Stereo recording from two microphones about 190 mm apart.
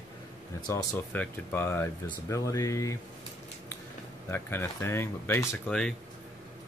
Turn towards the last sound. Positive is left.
turn(degrees=5)  # may be behind; listen again after turning